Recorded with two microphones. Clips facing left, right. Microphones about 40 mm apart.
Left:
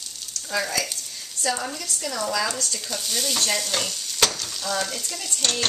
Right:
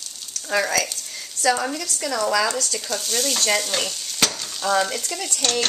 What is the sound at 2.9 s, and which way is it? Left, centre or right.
Speech, centre.